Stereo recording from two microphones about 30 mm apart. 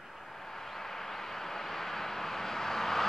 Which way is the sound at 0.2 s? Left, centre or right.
Centre.